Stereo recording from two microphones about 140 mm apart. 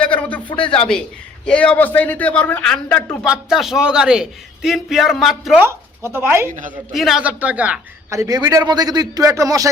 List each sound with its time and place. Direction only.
0.0 s a sound: 10° left (ahead or behind)
0.4 s speech: 35° left (ahead or behind)
0.7 s a man's voice: 5° left (ahead or behind)
5.5 s speech: 20° right (ahead or behind)
6.9 s a man's voice: centre (ahead or behind)
8.1 s a man's voice: 25° right (ahead or behind)